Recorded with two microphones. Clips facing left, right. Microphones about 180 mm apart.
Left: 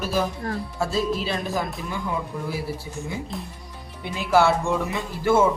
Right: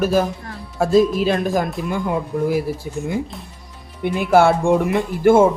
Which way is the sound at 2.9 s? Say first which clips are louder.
Right 7 dB; 70° right (ahead or behind).